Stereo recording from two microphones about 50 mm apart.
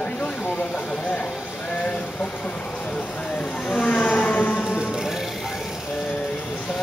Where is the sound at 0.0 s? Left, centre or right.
Left.